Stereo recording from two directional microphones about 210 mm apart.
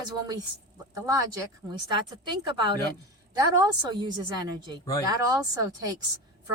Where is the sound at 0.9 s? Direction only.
15° right (ahead or behind).